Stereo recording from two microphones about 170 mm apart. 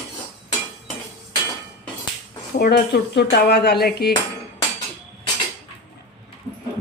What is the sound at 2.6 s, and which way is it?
Speech, 70° left (ahead or behind).